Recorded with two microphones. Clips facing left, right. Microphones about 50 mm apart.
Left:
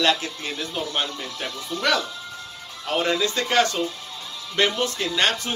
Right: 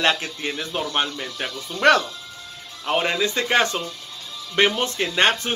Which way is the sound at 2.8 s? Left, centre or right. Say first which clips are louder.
Right 1 dB; right.